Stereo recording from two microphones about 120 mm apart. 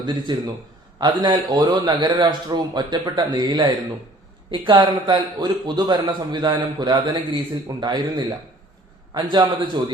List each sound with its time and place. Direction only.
0.0 s a man's voice: 40° right (ahead or behind)